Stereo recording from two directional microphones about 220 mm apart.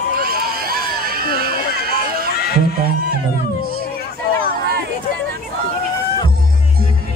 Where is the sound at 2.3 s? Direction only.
45° left (ahead or behind).